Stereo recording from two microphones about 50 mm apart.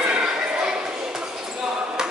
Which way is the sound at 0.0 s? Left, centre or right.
Centre.